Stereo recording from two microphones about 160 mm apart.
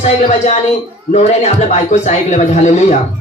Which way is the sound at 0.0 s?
40° left (ahead or behind).